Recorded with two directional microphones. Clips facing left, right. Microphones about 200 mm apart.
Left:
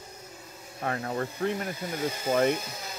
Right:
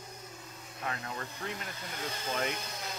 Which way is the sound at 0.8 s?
45° left (ahead or behind).